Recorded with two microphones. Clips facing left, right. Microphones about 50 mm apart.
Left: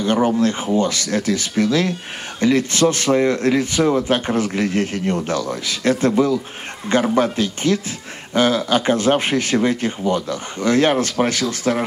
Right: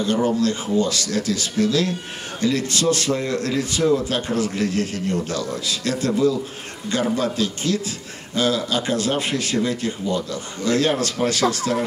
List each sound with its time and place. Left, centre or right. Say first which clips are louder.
0.0 s speech: left 3 dB; left